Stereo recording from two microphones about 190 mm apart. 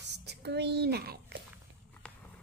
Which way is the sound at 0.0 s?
60° right (ahead or behind).